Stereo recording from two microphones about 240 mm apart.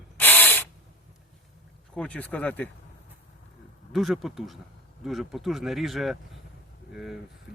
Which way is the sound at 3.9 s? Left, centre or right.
Centre.